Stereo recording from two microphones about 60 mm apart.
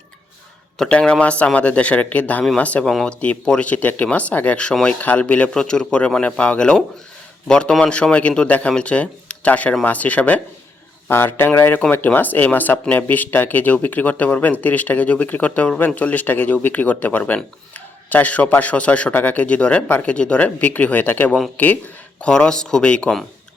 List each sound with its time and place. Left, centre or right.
0.8 s a man's voice: centre
2.8 s a man's voice: centre
3.2 s a man's voice: left
11.1 s speech: left
22.2 s a man's voice: centre